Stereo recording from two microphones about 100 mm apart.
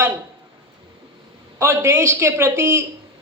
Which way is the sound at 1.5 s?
25° right (ahead or behind).